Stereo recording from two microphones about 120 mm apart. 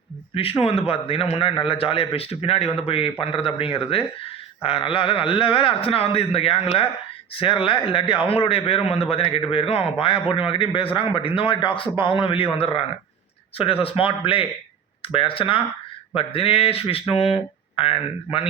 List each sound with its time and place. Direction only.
0.6 s a man's voice: 55° left (ahead or behind)
13.8 s a man's voice: 50° left (ahead or behind)